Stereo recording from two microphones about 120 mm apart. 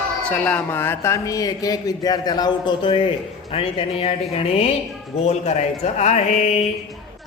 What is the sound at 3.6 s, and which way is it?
Speech, 55° left (ahead or behind).